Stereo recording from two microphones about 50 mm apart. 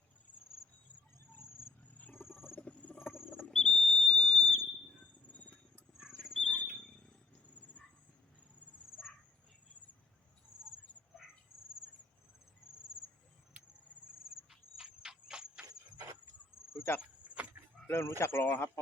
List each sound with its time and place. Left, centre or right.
2.1 s cricket: left
2.6 s rodents: left
3.1 s rodents: left
3.5 s whistle: centre
4.1 s fire alarm: centre
5.3 s a sound: left
6.0 s a sound: centre
6.4 s a sound: left
14.3 s cricket: centre
16.7 s insect: left
17.2 s goat: right
17.8 s speech: left